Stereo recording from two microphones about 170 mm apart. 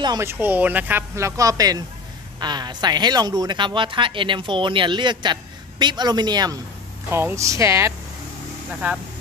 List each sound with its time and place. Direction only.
0.0 s speech: 20° right (ahead or behind)